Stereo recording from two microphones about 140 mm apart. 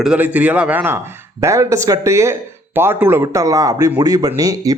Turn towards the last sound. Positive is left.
turn(degrees=-25)  # may be behind; listen again after turning